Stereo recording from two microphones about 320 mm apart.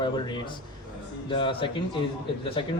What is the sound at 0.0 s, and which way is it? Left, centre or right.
A man's voice, centre.